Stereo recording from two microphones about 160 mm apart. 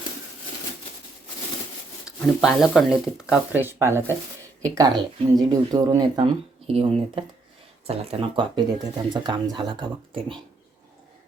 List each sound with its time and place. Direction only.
2.0 s speech: centre (ahead or behind); by 10.3 s 30° right (ahead or behind)